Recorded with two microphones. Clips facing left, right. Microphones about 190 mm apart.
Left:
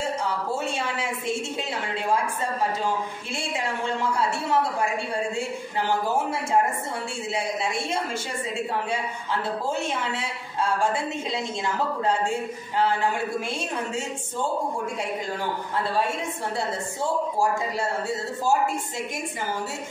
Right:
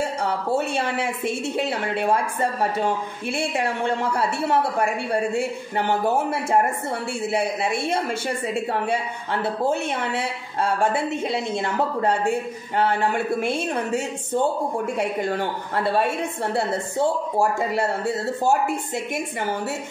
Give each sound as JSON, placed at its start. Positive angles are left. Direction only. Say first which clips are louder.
{"t": 0.2, "sound": "a woman's voice", "louder": "right 4 dB", "side_deg": -60}
{"t": 3.3, "sound": "a woman's voice", "louder": "right 5 dB", "side_deg": -60}